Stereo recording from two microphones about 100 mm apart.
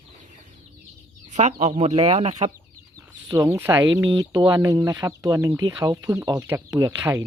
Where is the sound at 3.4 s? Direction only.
30° right (ahead or behind).